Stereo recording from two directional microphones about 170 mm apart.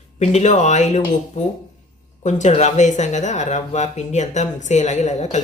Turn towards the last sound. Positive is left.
turn(degrees=40)  # may be behind; listen again after turning